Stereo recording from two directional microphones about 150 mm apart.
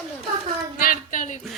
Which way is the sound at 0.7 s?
70° left (ahead or behind).